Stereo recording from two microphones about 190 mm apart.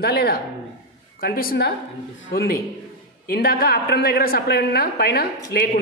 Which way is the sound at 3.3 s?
50° left (ahead or behind).